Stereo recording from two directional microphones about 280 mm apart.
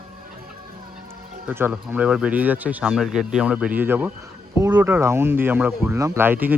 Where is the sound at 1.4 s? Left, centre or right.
Centre.